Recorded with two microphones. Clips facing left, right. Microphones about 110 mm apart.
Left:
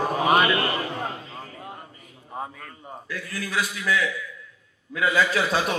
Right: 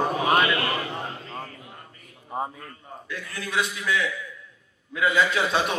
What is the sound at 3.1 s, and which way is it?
A man's voice, 25° right (ahead or behind).